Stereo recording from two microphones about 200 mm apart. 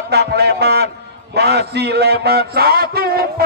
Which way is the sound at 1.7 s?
55° right (ahead or behind).